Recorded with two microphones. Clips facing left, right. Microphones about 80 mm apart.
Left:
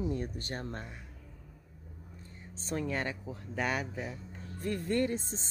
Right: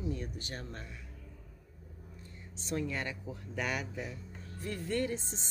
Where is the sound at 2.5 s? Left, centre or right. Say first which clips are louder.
Left 1 dB; left.